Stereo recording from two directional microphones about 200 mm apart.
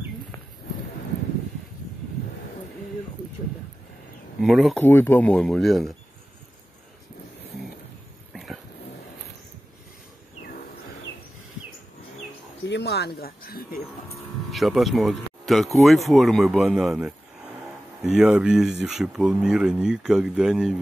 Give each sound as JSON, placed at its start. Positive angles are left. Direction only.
{"t": 4.4, "sound": "speech", "side_deg": 0}
{"t": 4.8, "sound": "speech", "side_deg": 10}
{"t": 8.3, "sound": "dog", "side_deg": 0}
{"t": 12.6, "sound": "speech", "side_deg": 60}
{"t": 14.5, "sound": "speech", "side_deg": 0}